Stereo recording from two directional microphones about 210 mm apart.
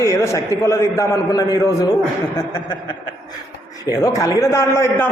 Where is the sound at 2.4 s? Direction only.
20° left (ahead or behind).